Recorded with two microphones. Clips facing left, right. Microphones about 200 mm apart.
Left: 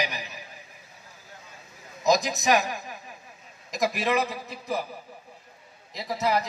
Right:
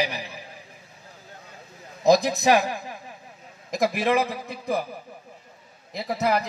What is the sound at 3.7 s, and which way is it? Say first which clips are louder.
A man's voice: right 3 dB; 55° right (ahead or behind).